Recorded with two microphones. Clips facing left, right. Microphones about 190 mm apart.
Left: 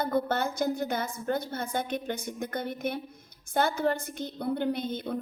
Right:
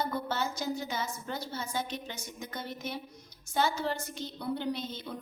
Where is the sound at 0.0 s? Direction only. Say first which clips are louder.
Left 5 dB; 55° left (ahead or behind).